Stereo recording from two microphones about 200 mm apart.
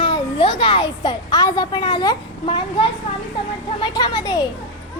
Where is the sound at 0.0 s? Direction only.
25° left (ahead or behind).